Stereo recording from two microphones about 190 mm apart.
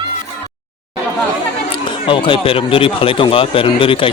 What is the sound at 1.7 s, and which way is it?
Speech, 25° left (ahead or behind).